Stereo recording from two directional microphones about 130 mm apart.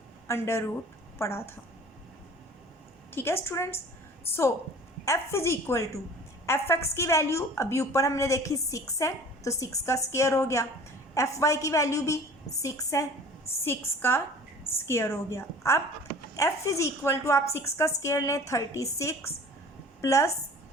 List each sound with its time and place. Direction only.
0.3 s a woman's voice: 20° left (ahead or behind)
3.2 s a woman's voice: 20° left (ahead or behind)